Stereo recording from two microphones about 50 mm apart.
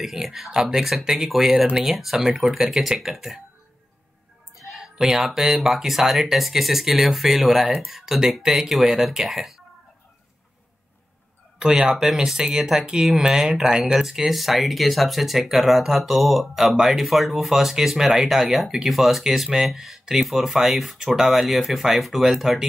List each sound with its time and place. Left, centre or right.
0.0 s speech: centre
4.6 s speech: centre
11.6 s speech: centre